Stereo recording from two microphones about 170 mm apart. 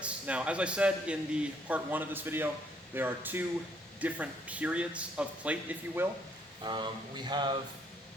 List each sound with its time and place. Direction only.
0.0 s speech: 5° right (ahead or behind)
6.7 s speech: 25° right (ahead or behind)